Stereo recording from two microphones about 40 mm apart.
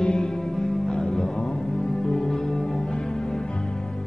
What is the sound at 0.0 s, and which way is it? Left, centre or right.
Music, centre.